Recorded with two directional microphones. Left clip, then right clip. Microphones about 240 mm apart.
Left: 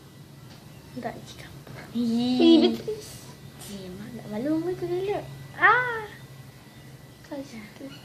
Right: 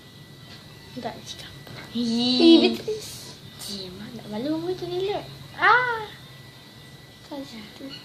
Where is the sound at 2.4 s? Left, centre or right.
Centre.